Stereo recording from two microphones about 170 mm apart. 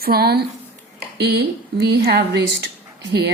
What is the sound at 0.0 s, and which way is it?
A woman's voice, 65° right (ahead or behind).